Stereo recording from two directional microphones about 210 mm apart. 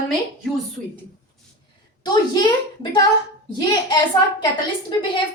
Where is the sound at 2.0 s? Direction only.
20° left (ahead or behind).